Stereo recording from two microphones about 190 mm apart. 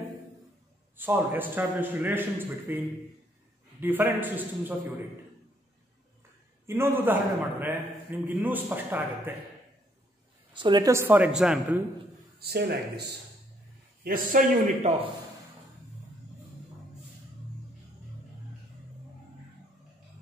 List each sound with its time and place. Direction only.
0.9 s a man's voice: 10° right (ahead or behind)
3.8 s a man's voice: 10° right (ahead or behind)
6.6 s a man's voice: 15° right (ahead or behind)
10.5 s a man's voice: 25° right (ahead or behind); by 11.8 s 5° right (ahead or behind)
12.4 s speech: 55° right (ahead or behind)
14.0 s a man's voice: 45° right (ahead or behind)